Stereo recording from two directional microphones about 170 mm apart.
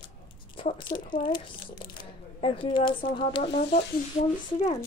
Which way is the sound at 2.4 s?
30° left (ahead or behind).